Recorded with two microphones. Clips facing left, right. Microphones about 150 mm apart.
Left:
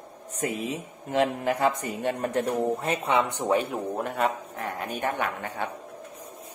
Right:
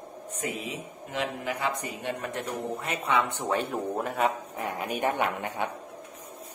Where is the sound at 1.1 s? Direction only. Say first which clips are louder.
Left 7 dB; 50° left (ahead or behind); by 3.2 s 30° left (ahead or behind).